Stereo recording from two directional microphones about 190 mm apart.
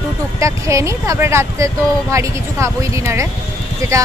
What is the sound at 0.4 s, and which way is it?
Speech, 15° right (ahead or behind).